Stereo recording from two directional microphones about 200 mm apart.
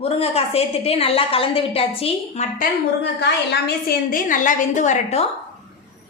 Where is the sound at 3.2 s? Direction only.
55° left (ahead or behind); by 5.3 s 35° left (ahead or behind).